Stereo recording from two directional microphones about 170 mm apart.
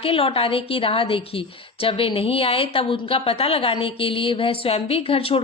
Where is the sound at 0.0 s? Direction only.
35° left (ahead or behind).